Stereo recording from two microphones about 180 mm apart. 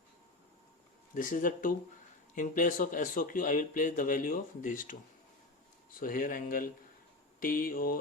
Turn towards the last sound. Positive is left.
turn(degrees=50)  # may be behind; listen again after turning